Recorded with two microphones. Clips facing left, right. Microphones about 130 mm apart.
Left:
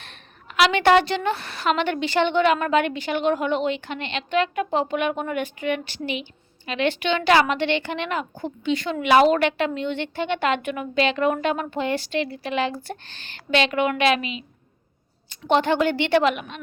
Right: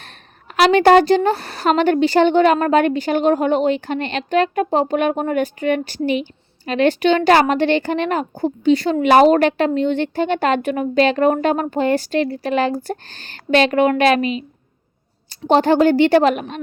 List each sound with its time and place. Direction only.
0.5 s a woman's voice: 40° right (ahead or behind)